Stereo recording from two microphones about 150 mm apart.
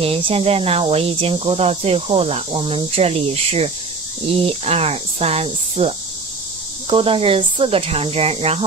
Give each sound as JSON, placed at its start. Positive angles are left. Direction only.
{"t": 0.0, "sound": "speech", "side_deg": -40}